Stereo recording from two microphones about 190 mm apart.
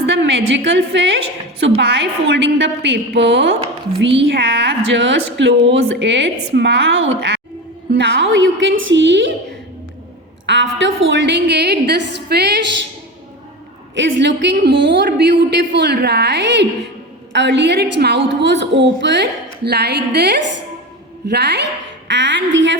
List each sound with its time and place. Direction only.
0.0 s a woman's voice: 65° right (ahead or behind)
10.4 s a woman's voice: 70° right (ahead or behind)
13.9 s a woman's voice: 70° right (ahead or behind)